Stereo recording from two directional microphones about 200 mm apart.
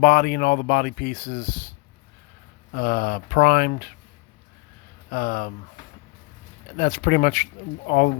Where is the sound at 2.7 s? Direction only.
50° left (ahead or behind).